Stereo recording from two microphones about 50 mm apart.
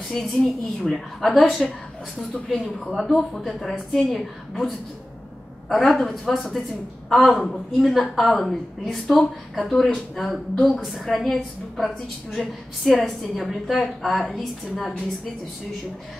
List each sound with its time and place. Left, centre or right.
0.2 s a woman's voice: centre